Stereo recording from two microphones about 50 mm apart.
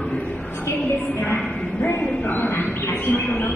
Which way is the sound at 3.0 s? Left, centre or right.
Left.